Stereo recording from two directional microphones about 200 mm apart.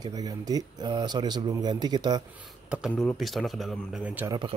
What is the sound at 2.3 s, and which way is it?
Speech, 5° right (ahead or behind).